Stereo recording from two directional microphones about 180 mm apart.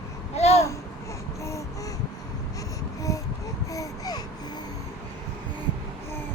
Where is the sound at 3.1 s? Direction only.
20° left (ahead or behind).